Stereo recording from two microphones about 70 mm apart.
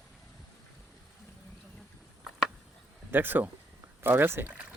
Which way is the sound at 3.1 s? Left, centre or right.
Right.